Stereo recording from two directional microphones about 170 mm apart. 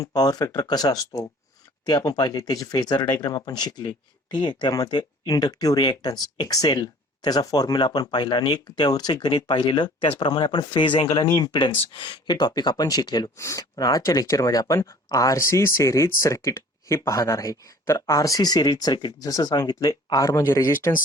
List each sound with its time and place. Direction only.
0.0 s speech: 25° left (ahead or behind)